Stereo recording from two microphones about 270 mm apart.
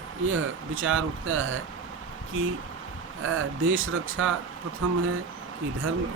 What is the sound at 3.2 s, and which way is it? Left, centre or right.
Speech, right.